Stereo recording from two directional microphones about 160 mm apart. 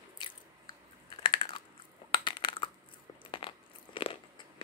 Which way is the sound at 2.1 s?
30° left (ahead or behind).